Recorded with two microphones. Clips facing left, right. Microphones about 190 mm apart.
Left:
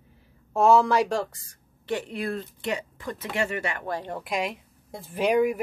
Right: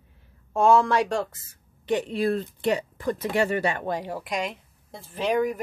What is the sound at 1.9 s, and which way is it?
Speech, 20° right (ahead or behind).